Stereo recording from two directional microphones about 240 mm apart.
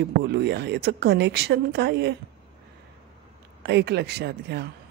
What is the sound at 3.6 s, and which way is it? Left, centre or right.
Speech, right.